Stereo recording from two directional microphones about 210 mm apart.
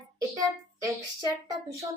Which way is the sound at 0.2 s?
15° right (ahead or behind).